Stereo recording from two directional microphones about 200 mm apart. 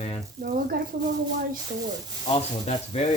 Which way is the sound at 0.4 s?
45° right (ahead or behind).